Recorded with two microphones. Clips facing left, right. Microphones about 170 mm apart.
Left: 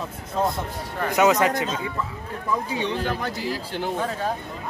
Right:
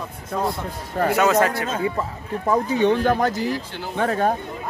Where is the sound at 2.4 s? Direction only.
50° right (ahead or behind).